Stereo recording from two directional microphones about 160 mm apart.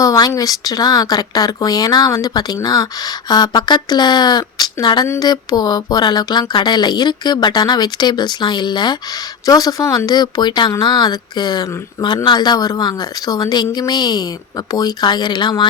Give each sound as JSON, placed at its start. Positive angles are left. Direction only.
{"t": 0.0, "sound": "speech", "side_deg": 20}